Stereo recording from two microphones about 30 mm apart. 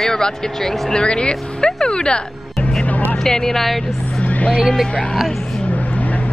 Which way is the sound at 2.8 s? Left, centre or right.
Left.